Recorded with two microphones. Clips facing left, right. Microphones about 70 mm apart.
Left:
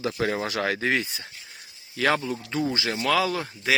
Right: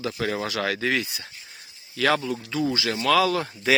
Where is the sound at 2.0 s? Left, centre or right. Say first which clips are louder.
Right 1 dB; centre.